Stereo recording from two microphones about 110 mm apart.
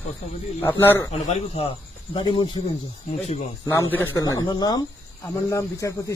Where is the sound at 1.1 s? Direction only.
75° left (ahead or behind).